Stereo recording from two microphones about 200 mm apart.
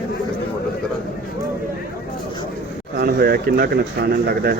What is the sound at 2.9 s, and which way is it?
Speech, 50° right (ahead or behind).